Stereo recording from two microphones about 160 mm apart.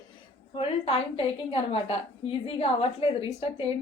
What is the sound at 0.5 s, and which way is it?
A woman's voice, 35° left (ahead or behind).